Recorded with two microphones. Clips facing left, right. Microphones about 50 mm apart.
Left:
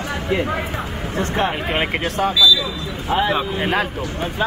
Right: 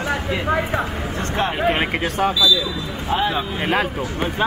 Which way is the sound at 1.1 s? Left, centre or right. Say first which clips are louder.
Left 3 dB; left.